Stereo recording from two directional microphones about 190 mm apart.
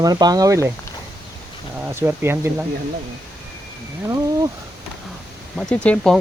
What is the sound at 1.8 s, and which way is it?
Speech, 10° right (ahead or behind).